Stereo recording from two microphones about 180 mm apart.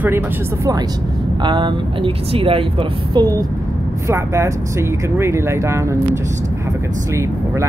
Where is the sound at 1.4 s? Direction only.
25° right (ahead or behind).